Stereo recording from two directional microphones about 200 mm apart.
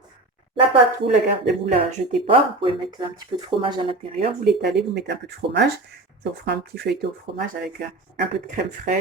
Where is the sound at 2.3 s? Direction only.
25° right (ahead or behind).